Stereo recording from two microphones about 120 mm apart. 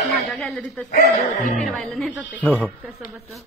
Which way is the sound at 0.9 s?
90° left.